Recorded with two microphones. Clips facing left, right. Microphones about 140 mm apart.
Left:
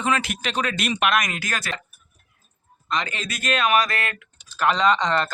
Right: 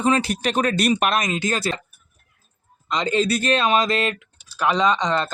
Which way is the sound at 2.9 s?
25° right (ahead or behind).